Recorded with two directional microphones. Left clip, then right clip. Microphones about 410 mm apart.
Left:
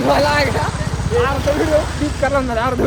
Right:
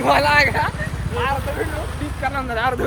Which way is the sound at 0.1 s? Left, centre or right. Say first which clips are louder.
Left 1 dB; centre.